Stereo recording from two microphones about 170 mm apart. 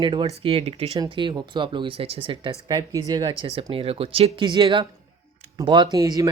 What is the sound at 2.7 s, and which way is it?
Speech, 20° right (ahead or behind).